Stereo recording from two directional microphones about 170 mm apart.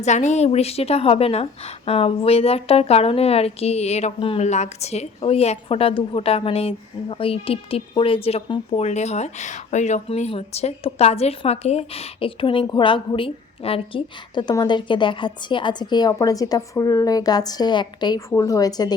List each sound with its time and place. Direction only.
0.0 s a woman's voice: 45° left (ahead or behind); by 18.9 s 25° left (ahead or behind)